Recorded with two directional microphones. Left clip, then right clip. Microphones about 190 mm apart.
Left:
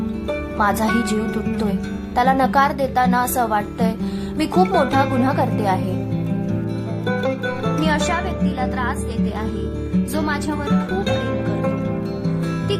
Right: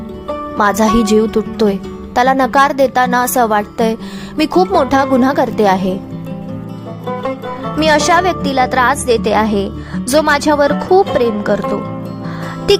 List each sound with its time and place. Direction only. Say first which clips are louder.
0.5 s a woman's voice: right 7 dB; 35° right (ahead or behind)
7.8 s a woman's voice: right 12 dB; 40° right (ahead or behind)